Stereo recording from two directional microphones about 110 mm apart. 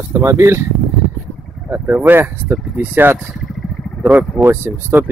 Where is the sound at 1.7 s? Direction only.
20° right (ahead or behind).